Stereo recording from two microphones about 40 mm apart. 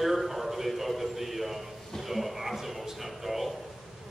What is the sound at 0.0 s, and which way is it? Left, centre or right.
A man's voice, centre.